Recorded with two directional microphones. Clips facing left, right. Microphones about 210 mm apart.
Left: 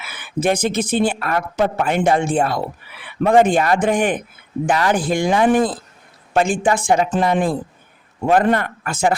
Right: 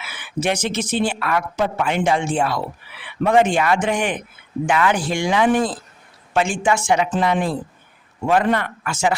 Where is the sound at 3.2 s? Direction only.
35° left (ahead or behind).